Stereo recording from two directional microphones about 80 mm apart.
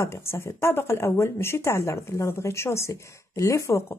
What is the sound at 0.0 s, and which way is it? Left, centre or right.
Speech, left.